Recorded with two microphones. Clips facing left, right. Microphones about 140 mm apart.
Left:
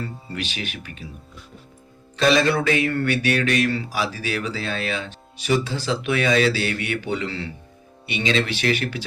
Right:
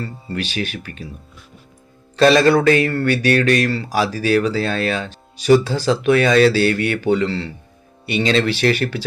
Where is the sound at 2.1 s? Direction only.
40° right (ahead or behind).